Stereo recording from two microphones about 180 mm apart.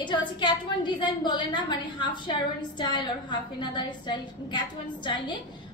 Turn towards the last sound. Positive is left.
turn(degrees=25)  # may be behind; listen again after turning